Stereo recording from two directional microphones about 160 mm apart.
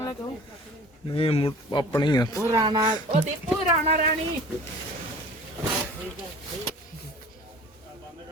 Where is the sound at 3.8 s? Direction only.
55° right (ahead or behind).